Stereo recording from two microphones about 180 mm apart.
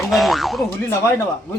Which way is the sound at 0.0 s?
Centre (ahead or behind).